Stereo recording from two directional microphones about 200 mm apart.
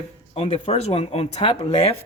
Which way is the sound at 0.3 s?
30° left (ahead or behind).